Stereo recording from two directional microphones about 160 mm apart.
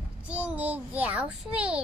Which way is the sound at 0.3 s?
10° right (ahead or behind).